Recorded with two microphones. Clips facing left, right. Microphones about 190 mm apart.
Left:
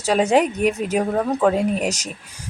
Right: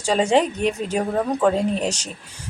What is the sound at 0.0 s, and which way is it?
A woman's voice, 5° left (ahead or behind).